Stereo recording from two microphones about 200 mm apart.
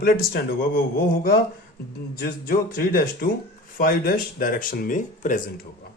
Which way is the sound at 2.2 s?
45° left (ahead or behind).